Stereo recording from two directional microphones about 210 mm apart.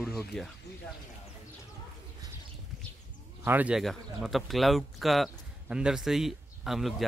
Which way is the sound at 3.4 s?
10° right (ahead or behind).